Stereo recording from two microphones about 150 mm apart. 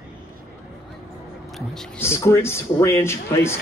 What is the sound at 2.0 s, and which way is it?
A man's voice, 20° left (ahead or behind).